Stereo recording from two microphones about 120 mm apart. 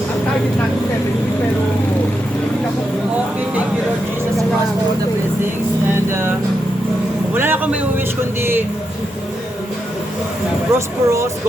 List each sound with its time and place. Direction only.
6.1 s speech: 20° right (ahead or behind)
7.3 s a man's voice: 15° right (ahead or behind)
10.8 s speech: 25° right (ahead or behind)